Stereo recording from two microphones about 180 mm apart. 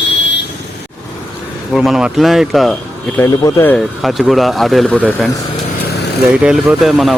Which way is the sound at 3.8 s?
Centre (ahead or behind).